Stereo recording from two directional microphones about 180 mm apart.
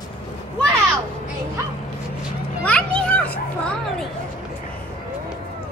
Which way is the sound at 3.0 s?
5° left (ahead or behind).